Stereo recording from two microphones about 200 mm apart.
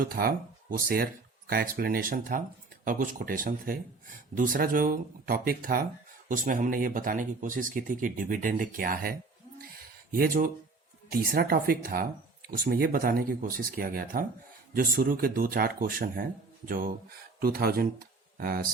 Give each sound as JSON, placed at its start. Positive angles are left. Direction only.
{"t": 0.0, "sound": "speech", "side_deg": -45}
{"t": 9.6, "sound": "a sound", "side_deg": -45}
{"t": 11.1, "sound": "speech", "side_deg": -45}